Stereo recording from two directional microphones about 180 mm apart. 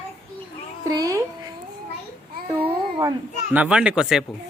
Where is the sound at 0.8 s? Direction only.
20° right (ahead or behind).